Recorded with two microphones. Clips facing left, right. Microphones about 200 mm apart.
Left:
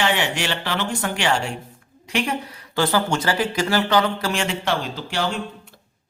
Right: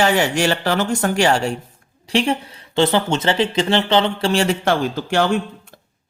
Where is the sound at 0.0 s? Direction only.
40° right (ahead or behind).